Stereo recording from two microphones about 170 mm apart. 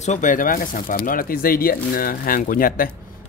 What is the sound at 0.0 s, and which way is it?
Speech, 45° left (ahead or behind).